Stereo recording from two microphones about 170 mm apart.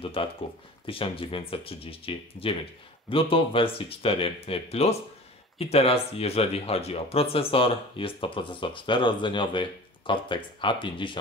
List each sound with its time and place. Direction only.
0.0 s speech: 30° left (ahead or behind)